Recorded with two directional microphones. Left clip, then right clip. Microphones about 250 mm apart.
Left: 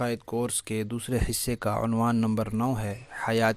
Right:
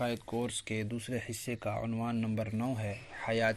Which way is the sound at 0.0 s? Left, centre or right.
Left.